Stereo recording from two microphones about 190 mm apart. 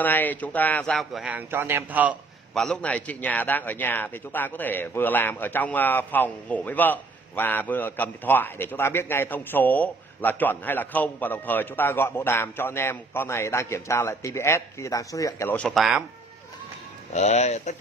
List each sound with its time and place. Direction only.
0.0 s a man's voice: 10° left (ahead or behind); by 2.1 s 10° right (ahead or behind)
2.5 s a man's voice: 5° left (ahead or behind)
17.1 s speech: 35° left (ahead or behind)